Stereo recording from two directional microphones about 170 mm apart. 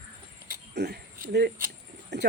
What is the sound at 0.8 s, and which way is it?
Keys jangling, 75° right (ahead or behind).